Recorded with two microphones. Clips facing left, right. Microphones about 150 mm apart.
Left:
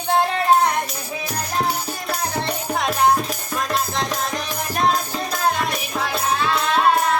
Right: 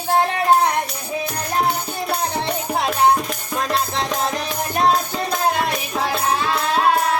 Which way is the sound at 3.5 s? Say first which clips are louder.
Right 2 dB; 30° right (ahead or behind).